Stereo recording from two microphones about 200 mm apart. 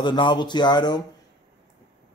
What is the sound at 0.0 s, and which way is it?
Speech, 25° left (ahead or behind).